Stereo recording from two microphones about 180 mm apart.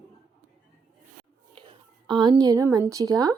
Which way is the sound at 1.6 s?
25° right (ahead or behind).